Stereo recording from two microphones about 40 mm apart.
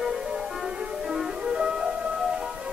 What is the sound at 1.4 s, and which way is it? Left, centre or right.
Music, right.